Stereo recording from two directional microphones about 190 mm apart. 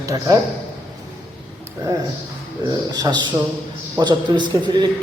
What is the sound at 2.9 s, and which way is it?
Speech, 20° right (ahead or behind).